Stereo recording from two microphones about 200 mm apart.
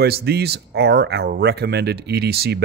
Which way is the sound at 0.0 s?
50° right (ahead or behind).